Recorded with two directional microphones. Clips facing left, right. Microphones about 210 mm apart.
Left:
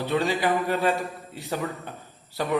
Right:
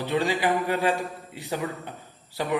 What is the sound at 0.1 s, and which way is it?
A man's voice, 15° right (ahead or behind).